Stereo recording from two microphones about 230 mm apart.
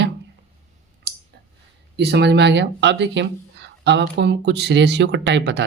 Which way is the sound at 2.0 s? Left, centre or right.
Right.